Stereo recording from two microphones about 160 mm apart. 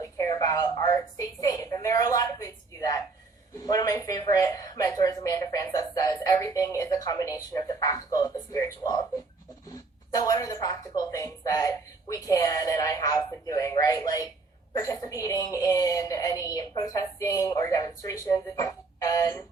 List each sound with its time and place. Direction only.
0.0 s a woman's voice: 20° left (ahead or behind)
10.2 s speech: 20° left (ahead or behind)